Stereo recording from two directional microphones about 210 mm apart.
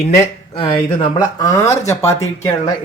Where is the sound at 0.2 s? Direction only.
25° left (ahead or behind).